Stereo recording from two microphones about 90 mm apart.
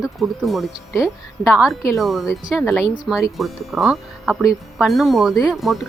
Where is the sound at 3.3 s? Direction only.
Centre (ahead or behind).